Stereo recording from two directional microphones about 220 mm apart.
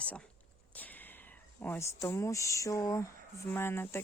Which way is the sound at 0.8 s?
10° left (ahead or behind).